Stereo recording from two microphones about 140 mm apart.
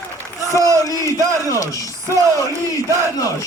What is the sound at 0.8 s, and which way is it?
Battle cry, 20° left (ahead or behind).